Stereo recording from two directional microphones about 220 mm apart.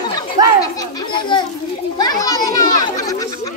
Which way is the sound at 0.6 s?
20° left (ahead or behind).